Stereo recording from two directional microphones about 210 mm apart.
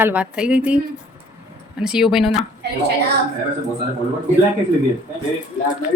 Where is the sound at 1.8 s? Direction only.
5° right (ahead or behind).